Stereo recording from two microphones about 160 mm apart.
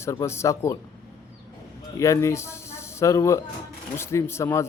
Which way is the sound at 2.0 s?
20° left (ahead or behind).